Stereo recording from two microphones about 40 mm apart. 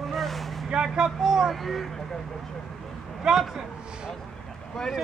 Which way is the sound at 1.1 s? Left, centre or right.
Centre.